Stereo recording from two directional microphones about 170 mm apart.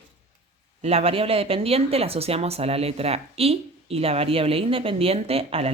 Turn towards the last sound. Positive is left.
turn(degrees=-35)  # may be behind; listen again after turning